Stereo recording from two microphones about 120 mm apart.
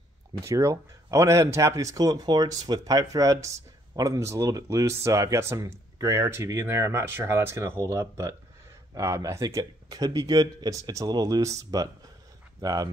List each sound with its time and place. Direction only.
0.3 s speech: 25° right (ahead or behind)